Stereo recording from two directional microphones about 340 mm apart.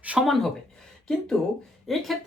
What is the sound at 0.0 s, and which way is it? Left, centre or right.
Speech, centre.